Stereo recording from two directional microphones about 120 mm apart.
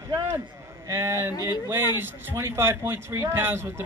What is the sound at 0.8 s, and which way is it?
Speech, 20° right (ahead or behind).